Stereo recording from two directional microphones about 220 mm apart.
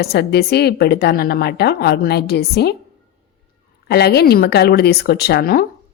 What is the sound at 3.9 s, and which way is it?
Speech, 45° left (ahead or behind).